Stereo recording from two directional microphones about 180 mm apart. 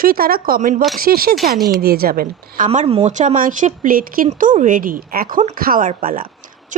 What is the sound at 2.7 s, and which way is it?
Speech, 35° right (ahead or behind).